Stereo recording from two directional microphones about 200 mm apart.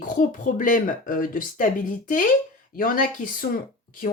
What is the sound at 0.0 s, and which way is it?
Speech, 40° left (ahead or behind).